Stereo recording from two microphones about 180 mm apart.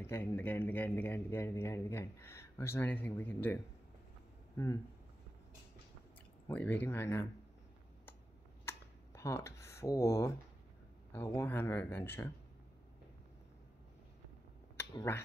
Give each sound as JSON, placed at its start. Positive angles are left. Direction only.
{"t": 0.0, "sound": "speech", "side_deg": 15}
{"t": 6.4, "sound": "speech", "side_deg": 10}
{"t": 8.6, "sound": "a sound", "side_deg": 15}
{"t": 11.1, "sound": "speech", "side_deg": 10}
{"t": 14.8, "sound": "speech", "side_deg": 15}